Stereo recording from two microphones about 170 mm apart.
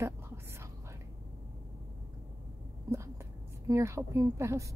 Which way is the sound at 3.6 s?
15° right (ahead or behind).